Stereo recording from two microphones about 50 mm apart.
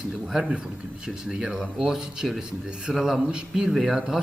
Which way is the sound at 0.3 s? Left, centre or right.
Centre.